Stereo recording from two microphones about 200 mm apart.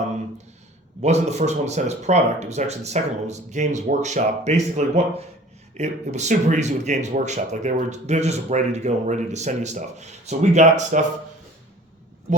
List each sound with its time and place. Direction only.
1.0 s speech: 35° right (ahead or behind)